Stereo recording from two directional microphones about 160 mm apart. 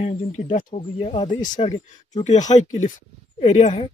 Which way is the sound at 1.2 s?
55° left (ahead or behind).